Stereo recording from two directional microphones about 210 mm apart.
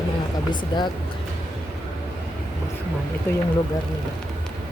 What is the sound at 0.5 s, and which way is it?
Speech, 20° left (ahead or behind).